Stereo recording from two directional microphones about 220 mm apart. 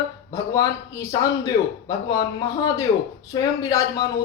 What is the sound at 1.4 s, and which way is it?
Speech, 15° left (ahead or behind).